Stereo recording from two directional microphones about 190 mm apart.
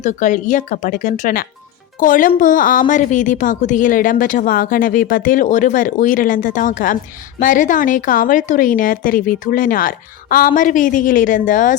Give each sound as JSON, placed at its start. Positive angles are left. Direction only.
{"t": 0.0, "sound": "a woman's voice", "side_deg": 40}